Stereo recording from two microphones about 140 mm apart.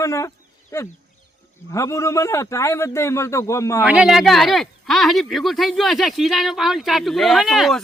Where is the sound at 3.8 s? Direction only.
10° right (ahead or behind).